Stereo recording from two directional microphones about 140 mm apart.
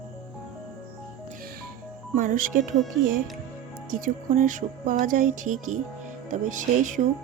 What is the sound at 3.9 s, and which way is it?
A woman's voice, 75° right (ahead or behind).